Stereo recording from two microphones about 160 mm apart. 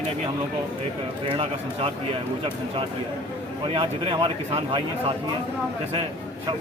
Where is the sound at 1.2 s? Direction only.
35° right (ahead or behind).